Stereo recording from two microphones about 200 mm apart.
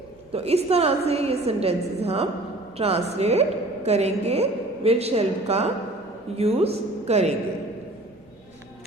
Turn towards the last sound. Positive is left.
turn(degrees=-30)  # may be behind; listen again after turning